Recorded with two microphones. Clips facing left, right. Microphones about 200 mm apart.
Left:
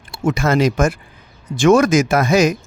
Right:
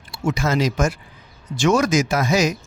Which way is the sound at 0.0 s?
50° left (ahead or behind).